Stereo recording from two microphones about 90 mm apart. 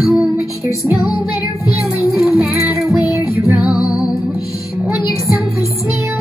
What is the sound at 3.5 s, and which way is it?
Music, 15° right (ahead or behind).